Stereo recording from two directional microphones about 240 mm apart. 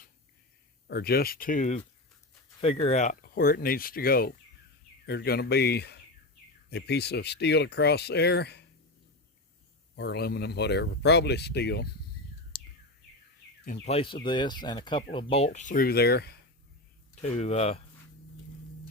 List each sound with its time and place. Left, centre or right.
0.9 s speech: left
9.9 s speech: left
12.5 s a sound: left
13.8 s speech: left
17.2 s speech: left